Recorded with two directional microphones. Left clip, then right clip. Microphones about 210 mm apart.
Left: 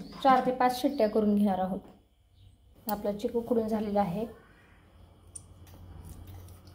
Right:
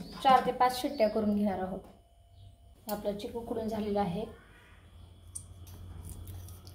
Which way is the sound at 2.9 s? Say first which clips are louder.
Left 4 dB; 25° left (ahead or behind).